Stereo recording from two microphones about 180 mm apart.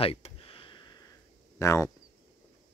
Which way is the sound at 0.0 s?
30° left (ahead or behind).